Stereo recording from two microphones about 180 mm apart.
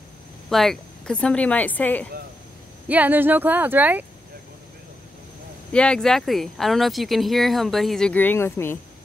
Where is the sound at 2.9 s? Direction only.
10° right (ahead or behind).